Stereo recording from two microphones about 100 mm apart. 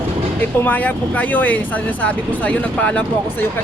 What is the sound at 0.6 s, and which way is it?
Speech, 15° left (ahead or behind).